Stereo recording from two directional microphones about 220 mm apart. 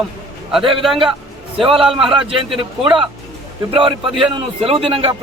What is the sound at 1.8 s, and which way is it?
Speech, centre (ahead or behind).